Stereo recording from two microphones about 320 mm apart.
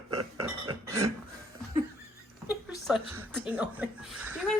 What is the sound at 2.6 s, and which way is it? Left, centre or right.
A woman's voice, centre.